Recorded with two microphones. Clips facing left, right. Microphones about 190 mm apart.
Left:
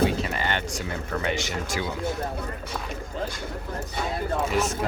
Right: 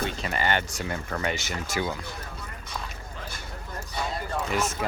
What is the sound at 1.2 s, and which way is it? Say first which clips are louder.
Speech: left 3 dB; 45° right (ahead or behind).